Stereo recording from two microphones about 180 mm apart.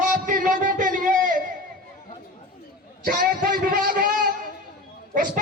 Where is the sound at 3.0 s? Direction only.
50° right (ahead or behind).